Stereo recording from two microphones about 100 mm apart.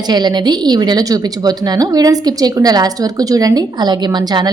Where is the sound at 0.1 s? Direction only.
45° right (ahead or behind).